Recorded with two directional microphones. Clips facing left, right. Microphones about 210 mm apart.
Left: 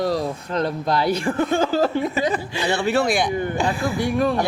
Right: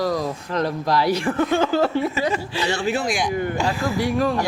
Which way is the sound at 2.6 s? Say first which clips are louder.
Left 4 dB; 60° left (ahead or behind).